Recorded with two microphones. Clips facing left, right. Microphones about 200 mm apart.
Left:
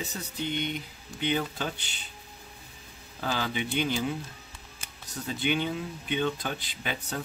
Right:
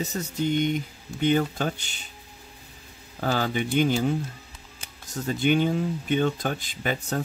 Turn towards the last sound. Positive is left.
turn(degrees=-45)  # may be behind; listen again after turning